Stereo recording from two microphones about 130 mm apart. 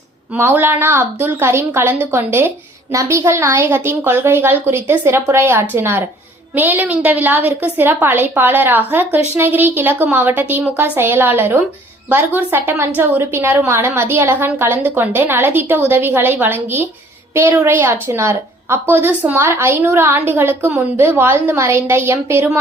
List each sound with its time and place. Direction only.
0.3 s a woman's voice: 15° right (ahead or behind)